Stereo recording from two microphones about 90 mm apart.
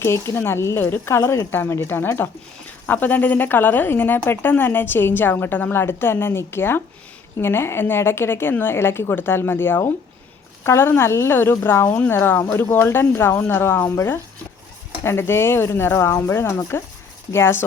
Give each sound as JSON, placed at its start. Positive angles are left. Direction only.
{"t": 0.0, "sound": "speech", "side_deg": 30}